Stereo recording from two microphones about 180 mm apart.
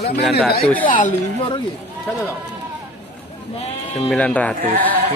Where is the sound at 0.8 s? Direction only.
45° left (ahead or behind).